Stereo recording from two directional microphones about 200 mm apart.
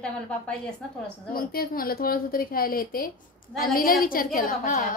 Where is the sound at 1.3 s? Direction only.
45° left (ahead or behind).